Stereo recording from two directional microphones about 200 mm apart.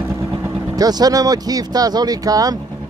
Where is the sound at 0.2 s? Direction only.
15° right (ahead or behind).